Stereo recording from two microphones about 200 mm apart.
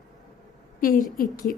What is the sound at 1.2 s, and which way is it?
Speech, 45° left (ahead or behind).